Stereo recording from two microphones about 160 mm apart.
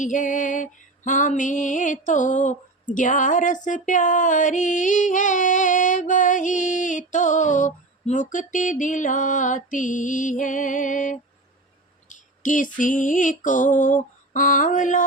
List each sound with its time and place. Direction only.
0.0 s music: 50° left (ahead or behind)